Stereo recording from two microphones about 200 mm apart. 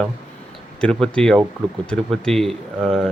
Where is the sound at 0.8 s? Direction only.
5° left (ahead or behind).